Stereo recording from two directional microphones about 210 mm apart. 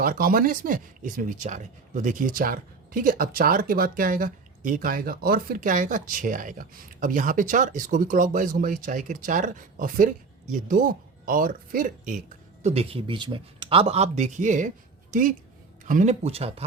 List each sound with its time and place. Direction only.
0.0 s speech: 45° right (ahead or behind)
12.6 s speech: 30° right (ahead or behind)